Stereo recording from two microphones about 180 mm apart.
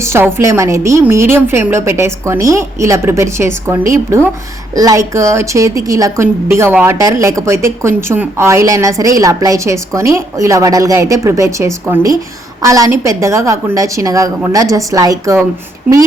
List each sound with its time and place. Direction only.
0.0 s a woman's voice: 15° right (ahead or behind)